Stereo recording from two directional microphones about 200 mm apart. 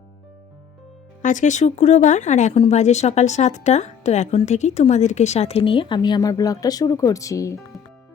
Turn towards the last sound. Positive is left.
turn(degrees=15)  # may be behind; listen again after turning